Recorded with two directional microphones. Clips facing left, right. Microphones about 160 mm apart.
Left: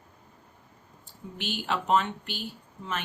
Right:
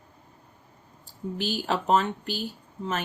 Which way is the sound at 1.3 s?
40° right (ahead or behind).